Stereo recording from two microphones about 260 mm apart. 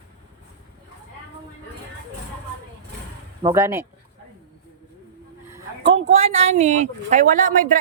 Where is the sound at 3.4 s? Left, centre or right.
Centre.